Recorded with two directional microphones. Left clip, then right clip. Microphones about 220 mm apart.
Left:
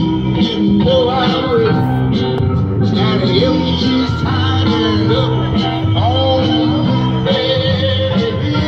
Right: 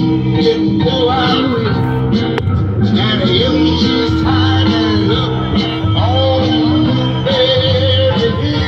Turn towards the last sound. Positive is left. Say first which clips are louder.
# right 2 dB
turn(degrees=45)  # may be behind; listen again after turning